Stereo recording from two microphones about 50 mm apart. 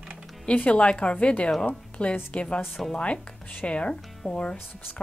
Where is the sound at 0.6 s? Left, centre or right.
Left.